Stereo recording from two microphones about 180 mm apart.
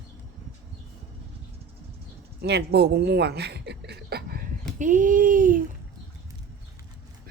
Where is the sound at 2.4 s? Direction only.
70° right (ahead or behind); by 5.6 s 50° right (ahead or behind).